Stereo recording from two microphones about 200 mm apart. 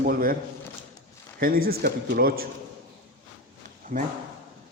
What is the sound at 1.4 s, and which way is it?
A man's voice, 50° right (ahead or behind).